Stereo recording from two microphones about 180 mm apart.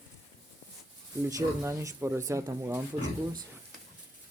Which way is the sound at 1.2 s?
15° right (ahead or behind).